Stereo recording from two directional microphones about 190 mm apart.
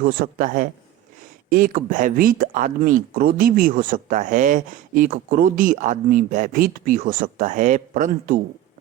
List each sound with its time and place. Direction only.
0.0 s speech: 50° right (ahead or behind)